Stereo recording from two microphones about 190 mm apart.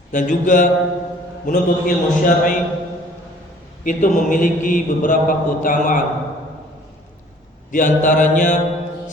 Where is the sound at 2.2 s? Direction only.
45° left (ahead or behind).